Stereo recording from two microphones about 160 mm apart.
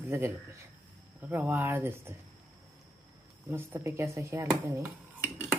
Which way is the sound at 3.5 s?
15° right (ahead or behind).